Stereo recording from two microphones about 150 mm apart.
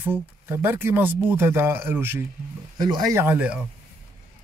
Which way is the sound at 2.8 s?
25° right (ahead or behind).